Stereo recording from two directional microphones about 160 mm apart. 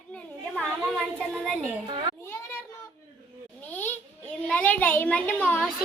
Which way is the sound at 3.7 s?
10° left (ahead or behind).